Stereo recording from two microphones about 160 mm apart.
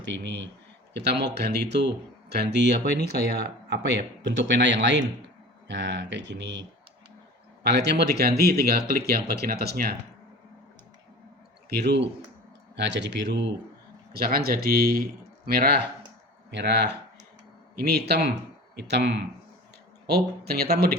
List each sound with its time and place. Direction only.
0.9 s speech: 90° right; by 9.9 s 75° right (ahead or behind)
11.7 s speech: 90° right
14.1 s speech: 70° right (ahead or behind)
16.5 s speech: 90° right